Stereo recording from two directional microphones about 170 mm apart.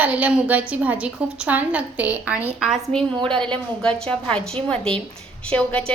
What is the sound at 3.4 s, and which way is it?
A woman's voice, 5° left (ahead or behind).